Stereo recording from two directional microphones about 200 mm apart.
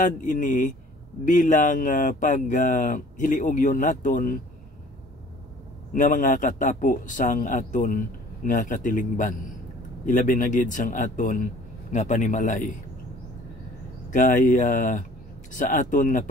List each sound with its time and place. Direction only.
0.0 s speech: 40° left (ahead or behind)
5.9 s speech: 40° left (ahead or behind)
14.1 s speech: 40° left (ahead or behind)